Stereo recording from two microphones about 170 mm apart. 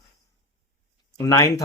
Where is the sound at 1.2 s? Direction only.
20° left (ahead or behind).